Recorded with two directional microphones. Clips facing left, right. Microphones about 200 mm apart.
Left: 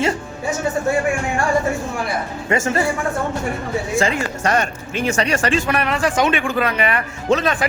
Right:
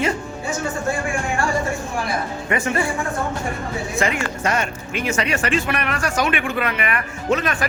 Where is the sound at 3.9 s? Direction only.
30° left (ahead or behind).